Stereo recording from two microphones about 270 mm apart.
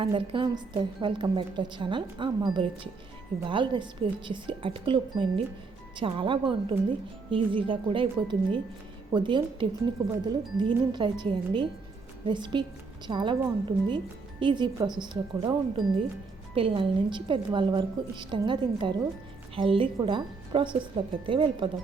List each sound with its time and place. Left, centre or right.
0.0 s speech: centre